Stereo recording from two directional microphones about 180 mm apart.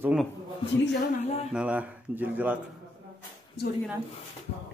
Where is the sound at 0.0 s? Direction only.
5° right (ahead or behind).